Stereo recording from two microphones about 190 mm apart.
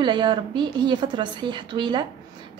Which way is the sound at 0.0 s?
25° right (ahead or behind).